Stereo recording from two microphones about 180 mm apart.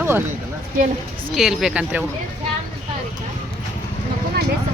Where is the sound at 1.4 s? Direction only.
5° right (ahead or behind).